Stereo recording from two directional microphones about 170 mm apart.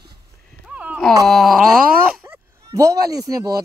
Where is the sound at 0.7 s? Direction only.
10° right (ahead or behind).